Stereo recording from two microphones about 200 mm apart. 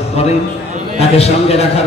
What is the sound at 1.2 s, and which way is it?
Speech, 30° left (ahead or behind).